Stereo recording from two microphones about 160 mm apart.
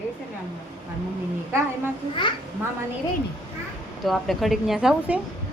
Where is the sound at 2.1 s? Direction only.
30° left (ahead or behind).